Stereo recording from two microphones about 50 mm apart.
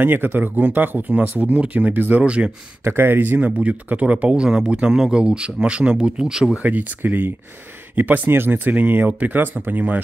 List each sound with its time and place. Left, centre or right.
0.0 s speech: right
0.6 s speech: right
2.2 s speech: right
2.8 s speech: right
3.4 s speech: right
6.6 s speech: right